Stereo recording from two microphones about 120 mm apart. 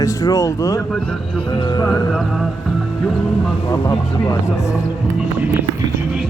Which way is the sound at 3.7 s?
30° left (ahead or behind).